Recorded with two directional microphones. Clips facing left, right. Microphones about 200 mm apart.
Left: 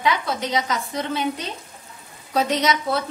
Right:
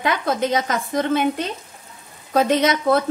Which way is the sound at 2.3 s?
55° right (ahead or behind).